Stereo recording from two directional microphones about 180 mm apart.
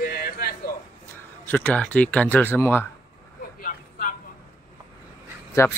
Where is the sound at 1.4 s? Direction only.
10° left (ahead or behind).